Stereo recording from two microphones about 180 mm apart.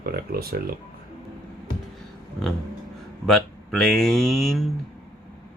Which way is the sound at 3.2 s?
5° left (ahead or behind).